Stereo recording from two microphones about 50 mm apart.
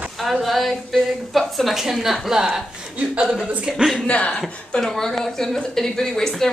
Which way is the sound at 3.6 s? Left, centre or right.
Centre.